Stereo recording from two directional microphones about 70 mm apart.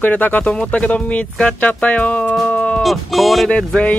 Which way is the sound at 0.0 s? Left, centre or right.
Left.